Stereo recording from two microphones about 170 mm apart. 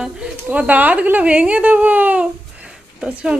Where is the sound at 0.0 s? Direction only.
5° right (ahead or behind).